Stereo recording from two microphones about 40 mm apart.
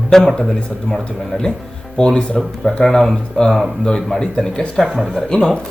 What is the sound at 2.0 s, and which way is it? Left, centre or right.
Speech, left.